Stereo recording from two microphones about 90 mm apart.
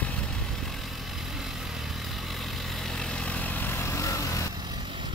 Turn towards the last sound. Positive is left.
turn(degrees=35)  # may be behind; listen again after turning